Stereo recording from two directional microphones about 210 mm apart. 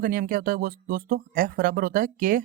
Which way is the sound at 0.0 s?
40° right (ahead or behind).